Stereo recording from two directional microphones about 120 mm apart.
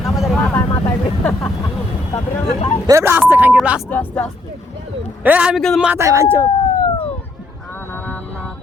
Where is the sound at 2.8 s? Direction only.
20° right (ahead or behind).